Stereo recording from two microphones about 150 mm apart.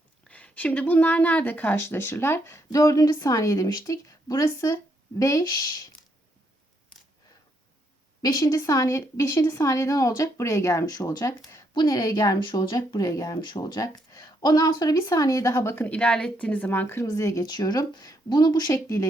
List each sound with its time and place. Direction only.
0.3 s speech: 10° left (ahead or behind); by 5.8 s 25° left (ahead or behind)
8.2 s speech: 25° left (ahead or behind)